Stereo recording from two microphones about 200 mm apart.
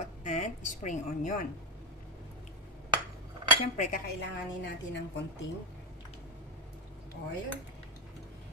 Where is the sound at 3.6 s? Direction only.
40° left (ahead or behind).